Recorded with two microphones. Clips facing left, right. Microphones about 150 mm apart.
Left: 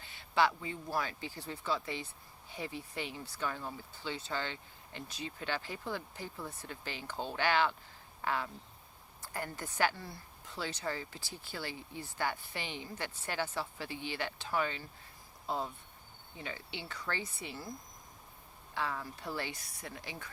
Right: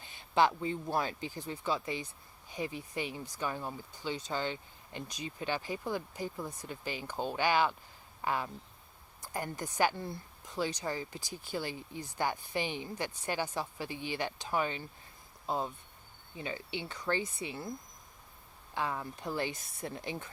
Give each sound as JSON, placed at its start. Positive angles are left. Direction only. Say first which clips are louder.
{"t": 0.0, "sound": "a sound", "louder": "right 2 dB", "side_deg": -20}
{"t": 0.6, "sound": "a woman's voice", "louder": "right 4 dB", "side_deg": -25}
{"t": 18.7, "sound": "speech", "louder": "right 2 dB", "side_deg": -20}